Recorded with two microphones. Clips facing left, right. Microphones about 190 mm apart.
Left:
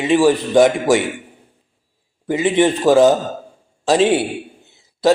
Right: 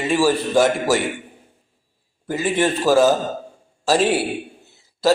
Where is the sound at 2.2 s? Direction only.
20° left (ahead or behind).